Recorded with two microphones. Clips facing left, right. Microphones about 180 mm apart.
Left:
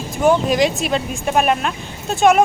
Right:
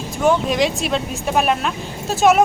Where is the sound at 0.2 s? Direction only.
Centre (ahead or behind).